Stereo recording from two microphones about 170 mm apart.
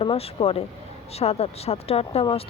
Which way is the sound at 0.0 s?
35° left (ahead or behind).